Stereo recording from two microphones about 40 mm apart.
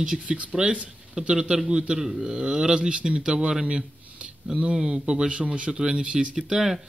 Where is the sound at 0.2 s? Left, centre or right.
Right.